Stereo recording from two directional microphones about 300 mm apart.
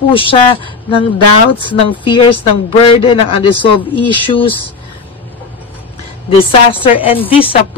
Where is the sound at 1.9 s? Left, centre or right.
Centre.